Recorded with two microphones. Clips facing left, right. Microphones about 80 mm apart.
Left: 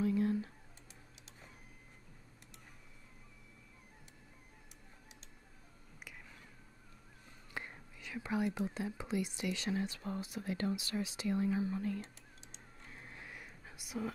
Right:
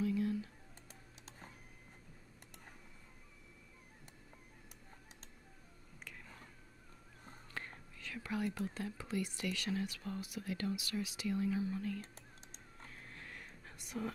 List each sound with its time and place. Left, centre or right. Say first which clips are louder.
0.0 s computer keyboard: left 3 dB; left
7.5 s speech: left 2 dB; centre
12.9 s a sound: left 2 dB; centre